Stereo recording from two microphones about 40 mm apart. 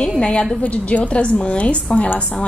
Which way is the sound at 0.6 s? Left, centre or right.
Left.